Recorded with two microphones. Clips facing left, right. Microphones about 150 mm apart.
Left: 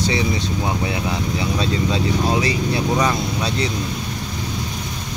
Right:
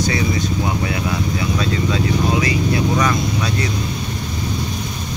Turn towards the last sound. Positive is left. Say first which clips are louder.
# right 1 dB
turn(degrees=25)  # may be behind; listen again after turning